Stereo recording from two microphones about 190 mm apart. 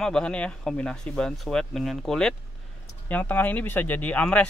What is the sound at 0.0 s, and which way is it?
Speech, 5° left (ahead or behind).